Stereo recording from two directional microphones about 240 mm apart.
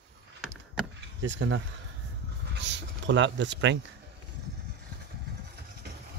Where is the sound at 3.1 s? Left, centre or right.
Right.